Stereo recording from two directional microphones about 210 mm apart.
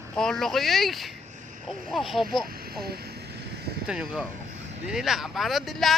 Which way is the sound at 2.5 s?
45° right (ahead or behind).